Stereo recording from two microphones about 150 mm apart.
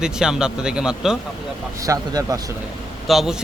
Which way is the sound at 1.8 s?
25° right (ahead or behind).